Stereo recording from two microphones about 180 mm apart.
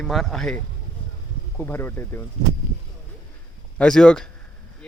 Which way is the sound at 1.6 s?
10° left (ahead or behind).